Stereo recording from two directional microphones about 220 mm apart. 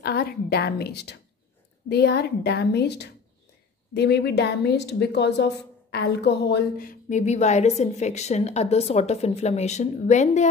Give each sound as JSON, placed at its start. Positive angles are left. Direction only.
{"t": 0.0, "sound": "a woman's voice", "side_deg": 45}